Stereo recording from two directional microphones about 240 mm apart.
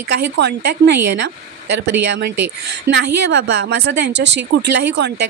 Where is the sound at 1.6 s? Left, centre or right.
Right.